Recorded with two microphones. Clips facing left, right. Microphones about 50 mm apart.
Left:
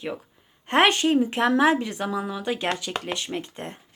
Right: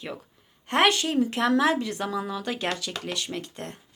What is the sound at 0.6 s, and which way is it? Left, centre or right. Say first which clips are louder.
A woman's voice: left 3 dB; left.